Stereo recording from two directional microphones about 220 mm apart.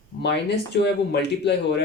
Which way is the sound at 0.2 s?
50° left (ahead or behind).